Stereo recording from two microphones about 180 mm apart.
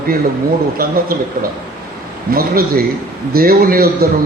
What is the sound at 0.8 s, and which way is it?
A man's voice, 55° right (ahead or behind).